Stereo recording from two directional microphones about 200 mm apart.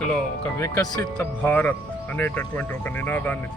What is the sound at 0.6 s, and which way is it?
Speech, 15° left (ahead or behind).